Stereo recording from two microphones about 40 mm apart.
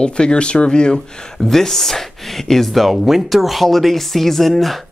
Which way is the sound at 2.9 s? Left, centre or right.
Centre.